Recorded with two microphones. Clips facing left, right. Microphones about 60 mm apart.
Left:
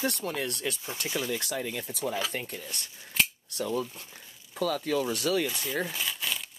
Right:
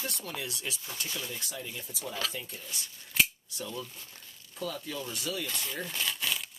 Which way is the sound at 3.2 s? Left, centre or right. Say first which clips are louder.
Even; centre.